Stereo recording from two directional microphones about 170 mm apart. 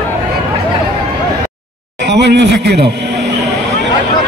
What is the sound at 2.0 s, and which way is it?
Speech, 90° right.